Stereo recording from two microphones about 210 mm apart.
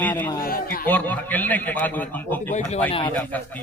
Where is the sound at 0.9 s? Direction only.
10° left (ahead or behind).